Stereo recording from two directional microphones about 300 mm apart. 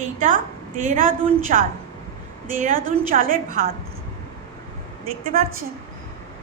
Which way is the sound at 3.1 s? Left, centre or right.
Right.